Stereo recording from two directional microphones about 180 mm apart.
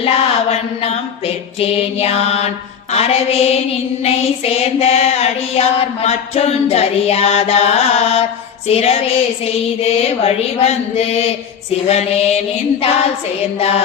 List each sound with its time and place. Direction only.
0.0 s mantra: 35° left (ahead or behind)
2.9 s child singing: 35° left (ahead or behind)
13.6 s child singing: 35° left (ahead or behind)